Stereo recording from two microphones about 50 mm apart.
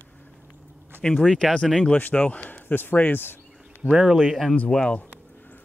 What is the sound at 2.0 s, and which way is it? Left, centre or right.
Speech, left.